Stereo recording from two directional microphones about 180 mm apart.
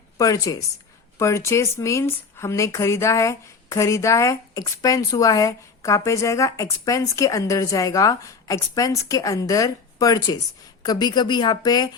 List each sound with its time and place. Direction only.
0.2 s a woman's voice: 20° left (ahead or behind)